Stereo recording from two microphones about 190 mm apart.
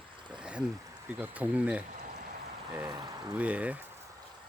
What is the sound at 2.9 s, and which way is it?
Speech, 20° right (ahead or behind).